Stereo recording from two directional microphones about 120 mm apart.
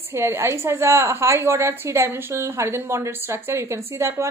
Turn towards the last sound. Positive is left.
turn(degrees=-20)  # may be behind; listen again after turning